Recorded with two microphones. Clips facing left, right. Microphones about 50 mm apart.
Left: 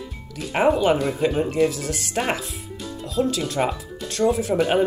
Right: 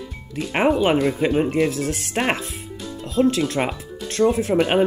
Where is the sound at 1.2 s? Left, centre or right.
Right.